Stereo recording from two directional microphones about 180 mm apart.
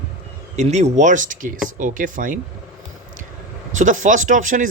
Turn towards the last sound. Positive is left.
turn(degrees=-45)  # may be behind; listen again after turning